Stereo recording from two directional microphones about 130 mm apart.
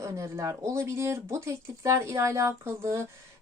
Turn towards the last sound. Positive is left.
turn(degrees=-20)  # may be behind; listen again after turning